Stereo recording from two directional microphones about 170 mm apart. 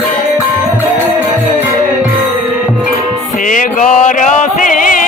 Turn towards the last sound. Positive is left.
turn(degrees=50)  # may be behind; listen again after turning